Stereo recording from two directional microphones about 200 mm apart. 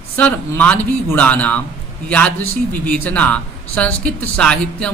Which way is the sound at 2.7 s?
10° left (ahead or behind).